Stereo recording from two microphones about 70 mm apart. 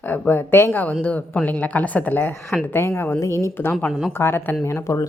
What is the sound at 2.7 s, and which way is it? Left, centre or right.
Speech, left.